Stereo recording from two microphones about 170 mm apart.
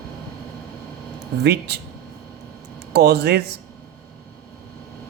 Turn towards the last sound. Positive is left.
turn(degrees=-70)  # may be behind; listen again after turning